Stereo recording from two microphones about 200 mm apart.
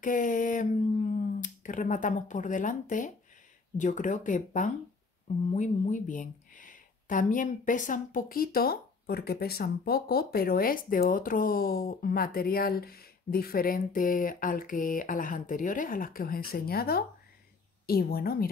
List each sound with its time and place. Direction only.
0.0 s speech: 40° left (ahead or behind)